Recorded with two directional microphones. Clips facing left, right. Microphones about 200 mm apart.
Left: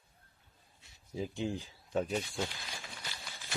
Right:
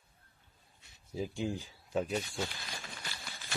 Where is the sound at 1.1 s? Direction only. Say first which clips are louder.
Even; 20° left (ahead or behind).